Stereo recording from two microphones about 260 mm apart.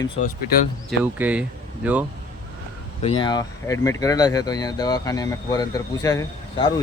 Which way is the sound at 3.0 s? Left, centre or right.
Centre.